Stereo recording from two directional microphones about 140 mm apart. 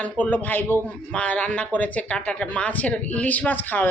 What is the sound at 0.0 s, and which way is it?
Speech, 10° left (ahead or behind).